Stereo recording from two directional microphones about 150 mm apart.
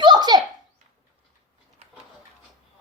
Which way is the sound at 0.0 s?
30° right (ahead or behind).